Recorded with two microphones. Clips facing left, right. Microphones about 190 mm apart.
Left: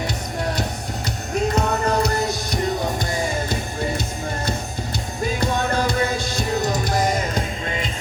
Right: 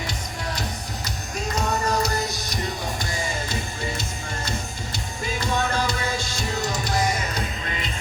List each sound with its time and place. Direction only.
1.5 s music: 60° left (ahead or behind)
5.2 s music: 55° left (ahead or behind)